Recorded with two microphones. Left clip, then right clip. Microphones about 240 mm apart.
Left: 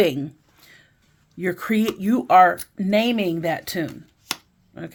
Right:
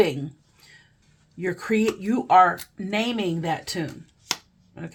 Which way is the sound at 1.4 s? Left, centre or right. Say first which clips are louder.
Left 1 dB; left.